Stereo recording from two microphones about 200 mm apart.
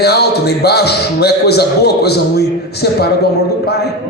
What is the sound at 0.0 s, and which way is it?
A man's voice, 55° left (ahead or behind).